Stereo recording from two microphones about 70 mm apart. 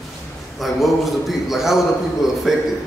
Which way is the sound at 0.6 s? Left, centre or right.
Centre.